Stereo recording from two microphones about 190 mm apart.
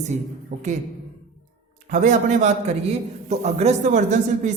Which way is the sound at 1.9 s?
40° right (ahead or behind).